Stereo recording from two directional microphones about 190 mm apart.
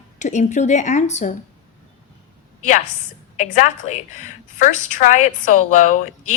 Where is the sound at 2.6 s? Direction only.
40° left (ahead or behind).